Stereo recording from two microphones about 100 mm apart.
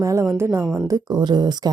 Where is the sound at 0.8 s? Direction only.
40° right (ahead or behind).